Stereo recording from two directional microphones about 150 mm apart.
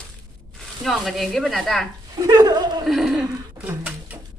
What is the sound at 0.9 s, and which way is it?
Speech, centre (ahead or behind).